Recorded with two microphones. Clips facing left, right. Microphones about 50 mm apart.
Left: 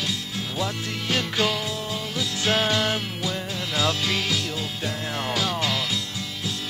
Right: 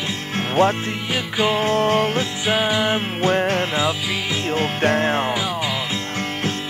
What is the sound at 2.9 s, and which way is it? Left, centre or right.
Music, right.